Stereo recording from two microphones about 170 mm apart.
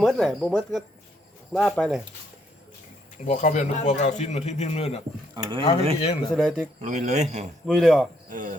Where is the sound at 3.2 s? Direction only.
45° left (ahead or behind).